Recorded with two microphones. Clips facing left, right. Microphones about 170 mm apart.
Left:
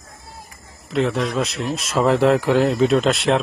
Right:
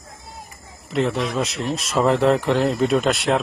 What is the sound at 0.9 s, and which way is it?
Speech, centre (ahead or behind).